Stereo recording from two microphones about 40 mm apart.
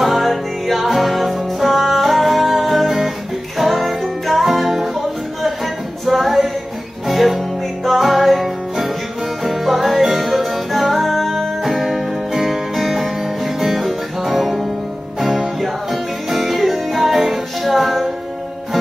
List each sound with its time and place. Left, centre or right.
0.0 s music: centre
6.0 s a capella: centre
7.1 s music: centre